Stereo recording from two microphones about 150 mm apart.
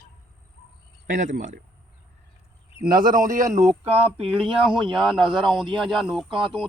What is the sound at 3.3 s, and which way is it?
Speech, 60° right (ahead or behind).